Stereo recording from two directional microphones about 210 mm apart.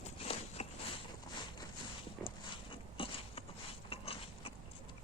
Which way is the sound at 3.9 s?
25° left (ahead or behind).